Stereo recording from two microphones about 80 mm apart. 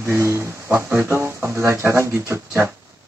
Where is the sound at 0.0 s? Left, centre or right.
Right.